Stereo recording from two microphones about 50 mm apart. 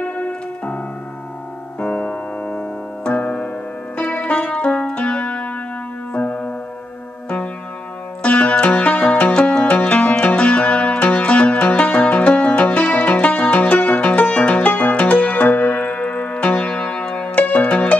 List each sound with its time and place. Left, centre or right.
0.0 s music: left
1.8 s music: left
8.2 s music: left
9.8 s music: left
15.4 s music: left